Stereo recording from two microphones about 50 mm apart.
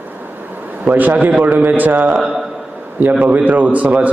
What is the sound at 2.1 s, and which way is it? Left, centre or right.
Speech, centre.